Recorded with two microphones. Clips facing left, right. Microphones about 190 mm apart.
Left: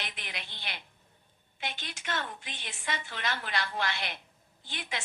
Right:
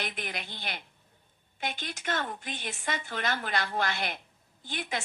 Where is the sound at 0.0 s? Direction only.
45° right (ahead or behind).